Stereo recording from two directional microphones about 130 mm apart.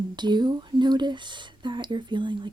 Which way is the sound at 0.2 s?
35° right (ahead or behind).